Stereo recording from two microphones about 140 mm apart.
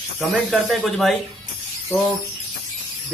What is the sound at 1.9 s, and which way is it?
Bird, 15° left (ahead or behind).